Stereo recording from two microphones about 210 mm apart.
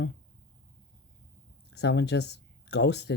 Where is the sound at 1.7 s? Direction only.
55° left (ahead or behind).